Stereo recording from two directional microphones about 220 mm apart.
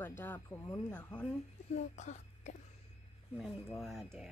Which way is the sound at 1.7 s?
30° left (ahead or behind).